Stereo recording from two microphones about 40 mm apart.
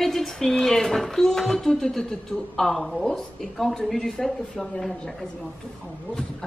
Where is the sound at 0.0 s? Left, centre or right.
Centre.